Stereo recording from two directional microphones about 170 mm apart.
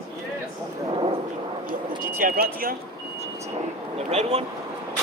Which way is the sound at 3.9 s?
40° right (ahead or behind).